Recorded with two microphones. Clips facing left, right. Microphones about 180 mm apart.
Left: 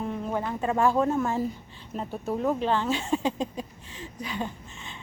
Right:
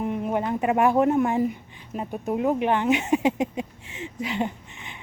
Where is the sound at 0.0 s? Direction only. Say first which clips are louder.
Right 4 dB; 15° right (ahead or behind).